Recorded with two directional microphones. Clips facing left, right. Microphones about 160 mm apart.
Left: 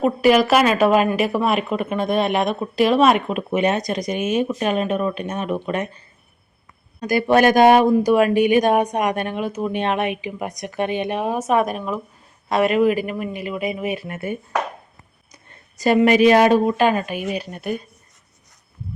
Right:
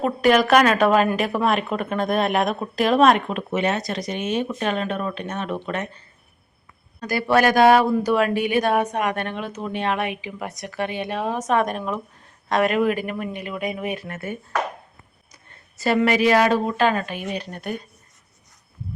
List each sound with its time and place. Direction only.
0.0 s speech: 5° left (ahead or behind)
7.0 s speech: 15° left (ahead or behind)
9.8 s speech: 20° left (ahead or behind)
15.8 s speech: 15° left (ahead or behind)